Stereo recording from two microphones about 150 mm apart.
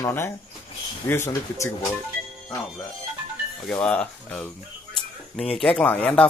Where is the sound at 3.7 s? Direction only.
10° left (ahead or behind).